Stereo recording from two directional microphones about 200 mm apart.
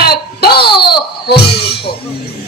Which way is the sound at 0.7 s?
55° left (ahead or behind).